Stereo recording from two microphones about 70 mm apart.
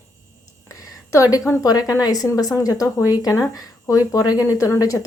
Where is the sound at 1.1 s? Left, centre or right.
Left.